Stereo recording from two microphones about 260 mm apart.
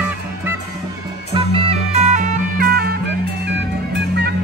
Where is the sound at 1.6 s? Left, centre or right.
Right.